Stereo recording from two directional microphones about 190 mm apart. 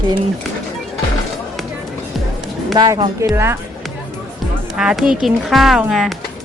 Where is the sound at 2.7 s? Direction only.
20° right (ahead or behind).